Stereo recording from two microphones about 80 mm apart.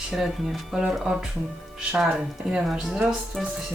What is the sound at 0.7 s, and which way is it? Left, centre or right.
Speech, centre.